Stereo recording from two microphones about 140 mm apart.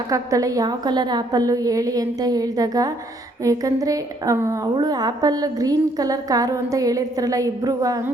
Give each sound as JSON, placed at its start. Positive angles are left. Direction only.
{"t": 0.1, "sound": "a woman's voice", "side_deg": -25}